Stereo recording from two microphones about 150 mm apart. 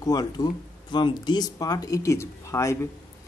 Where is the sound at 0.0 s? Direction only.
25° left (ahead or behind).